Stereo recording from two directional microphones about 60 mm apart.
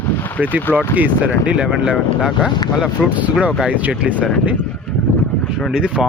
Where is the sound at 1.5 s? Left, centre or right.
Centre.